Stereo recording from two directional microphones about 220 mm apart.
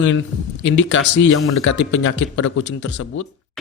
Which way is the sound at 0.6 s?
60° left (ahead or behind).